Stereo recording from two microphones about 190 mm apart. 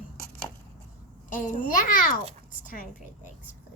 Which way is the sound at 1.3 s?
45° left (ahead or behind).